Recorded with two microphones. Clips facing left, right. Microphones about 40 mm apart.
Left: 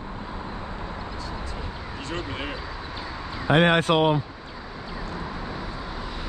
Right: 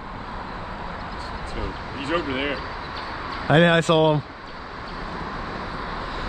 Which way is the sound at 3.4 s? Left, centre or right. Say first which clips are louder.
Right 2 dB; centre.